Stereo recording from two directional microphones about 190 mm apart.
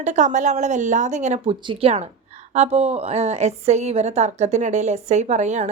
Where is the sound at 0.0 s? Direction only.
40° right (ahead or behind).